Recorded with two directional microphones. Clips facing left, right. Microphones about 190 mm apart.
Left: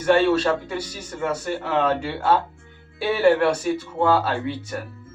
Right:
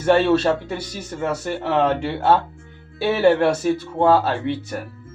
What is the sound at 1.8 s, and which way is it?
A man's voice, 25° right (ahead or behind).